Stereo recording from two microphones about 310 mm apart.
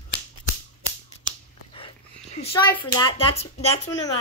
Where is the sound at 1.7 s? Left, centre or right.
Centre.